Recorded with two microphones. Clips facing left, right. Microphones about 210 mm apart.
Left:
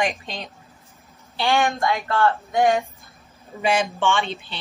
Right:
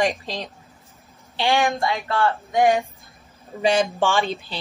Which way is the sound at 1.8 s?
15° right (ahead or behind).